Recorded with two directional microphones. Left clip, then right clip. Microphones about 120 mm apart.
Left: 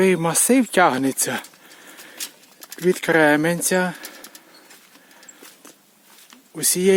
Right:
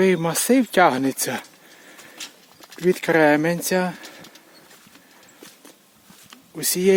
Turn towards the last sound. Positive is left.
turn(degrees=15)  # may be behind; listen again after turning